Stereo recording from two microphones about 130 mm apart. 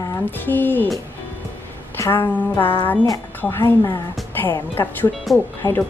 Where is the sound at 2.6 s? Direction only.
15° left (ahead or behind).